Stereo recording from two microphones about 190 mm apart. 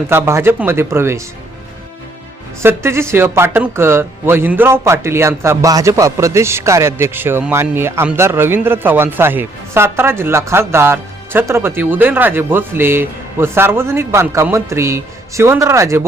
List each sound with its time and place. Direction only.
0.1 s speech: 15° right (ahead or behind)
2.6 s speech: 15° right (ahead or behind)